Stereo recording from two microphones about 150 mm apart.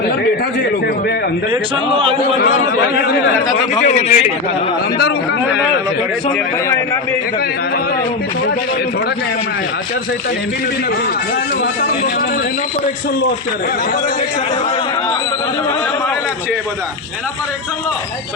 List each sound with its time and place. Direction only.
1.9 s a man's voice: 35° right (ahead or behind)
2.9 s speech: 90° left
3.8 s speech: 60° left (ahead or behind)
6.7 s a man's voice: 20° left (ahead or behind)